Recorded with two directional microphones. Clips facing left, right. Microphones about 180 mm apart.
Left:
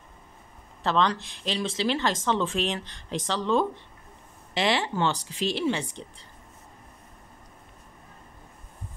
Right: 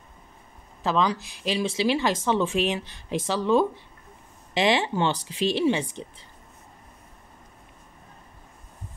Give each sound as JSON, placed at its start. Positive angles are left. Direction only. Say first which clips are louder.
{"t": 0.8, "sound": "speech", "louder": "right 1 dB", "side_deg": -5}